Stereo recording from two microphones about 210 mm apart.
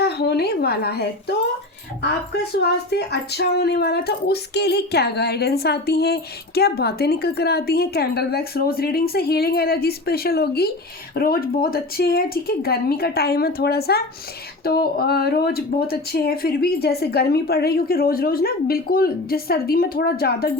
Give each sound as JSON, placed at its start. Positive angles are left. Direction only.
{"t": 0.0, "sound": "speech", "side_deg": 50}